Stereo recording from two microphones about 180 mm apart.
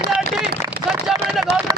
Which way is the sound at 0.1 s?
5° right (ahead or behind).